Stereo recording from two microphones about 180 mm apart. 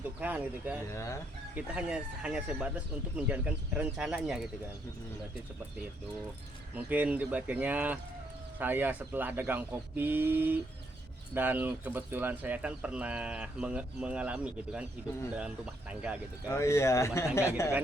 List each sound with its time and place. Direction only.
0.2 s speech: 10° right (ahead or behind)
0.9 s speech: 15° left (ahead or behind)
1.5 s speech: 5° right (ahead or behind)
6.7 s speech: 10° right (ahead or behind)
16.5 s speech: 15° left (ahead or behind)